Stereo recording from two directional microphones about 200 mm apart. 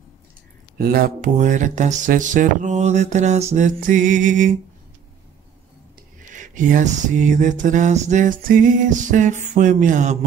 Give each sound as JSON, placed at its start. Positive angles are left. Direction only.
{"t": 0.7, "sound": "speech", "side_deg": -45}
{"t": 6.3, "sound": "speech", "side_deg": -40}